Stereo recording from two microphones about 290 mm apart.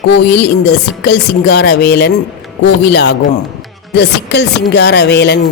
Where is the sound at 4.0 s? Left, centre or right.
Left.